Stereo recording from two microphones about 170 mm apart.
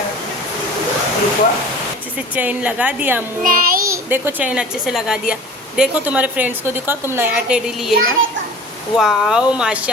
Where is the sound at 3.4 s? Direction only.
55° right (ahead or behind).